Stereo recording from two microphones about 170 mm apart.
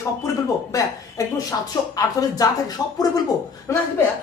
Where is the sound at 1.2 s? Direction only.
20° left (ahead or behind).